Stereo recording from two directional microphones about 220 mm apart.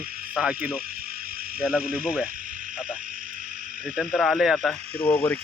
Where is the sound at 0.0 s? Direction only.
40° right (ahead or behind).